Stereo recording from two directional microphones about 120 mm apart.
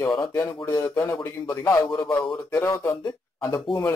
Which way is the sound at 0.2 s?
20° left (ahead or behind).